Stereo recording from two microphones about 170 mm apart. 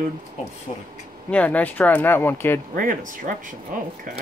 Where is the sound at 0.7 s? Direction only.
45° left (ahead or behind).